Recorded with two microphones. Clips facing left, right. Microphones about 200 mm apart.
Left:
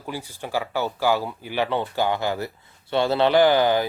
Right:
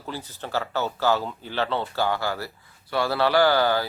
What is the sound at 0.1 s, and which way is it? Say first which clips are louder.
Speech: left 2 dB; 10° left (ahead or behind).